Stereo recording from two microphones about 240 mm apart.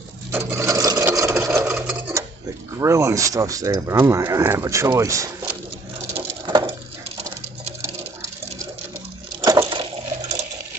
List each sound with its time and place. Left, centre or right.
0.3 s sewing machine: centre
2.8 s speech: centre
6.1 s patter: right
7.8 s patter: centre
9.4 s a sound: centre